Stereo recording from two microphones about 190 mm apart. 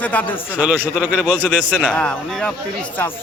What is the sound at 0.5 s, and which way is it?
A man's voice, 10° right (ahead or behind).